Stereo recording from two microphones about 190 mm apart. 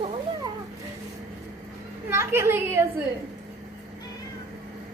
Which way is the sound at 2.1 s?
15° right (ahead or behind).